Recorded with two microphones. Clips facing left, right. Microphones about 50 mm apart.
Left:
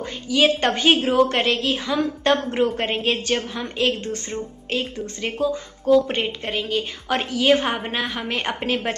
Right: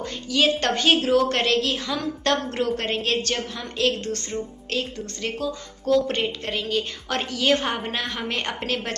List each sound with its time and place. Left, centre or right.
0.3 s a woman's voice: centre